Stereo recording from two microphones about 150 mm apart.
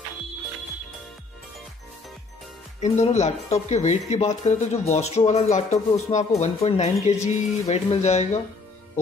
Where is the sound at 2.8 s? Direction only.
45° left (ahead or behind).